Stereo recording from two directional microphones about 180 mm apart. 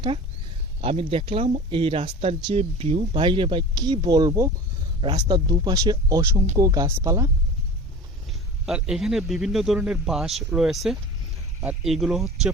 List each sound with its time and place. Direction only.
0.8 s speech: 30° right (ahead or behind)
8.3 s a man's voice: 5° right (ahead or behind)